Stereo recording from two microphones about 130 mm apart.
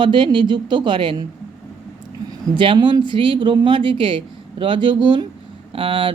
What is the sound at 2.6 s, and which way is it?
A woman's voice, 40° right (ahead or behind).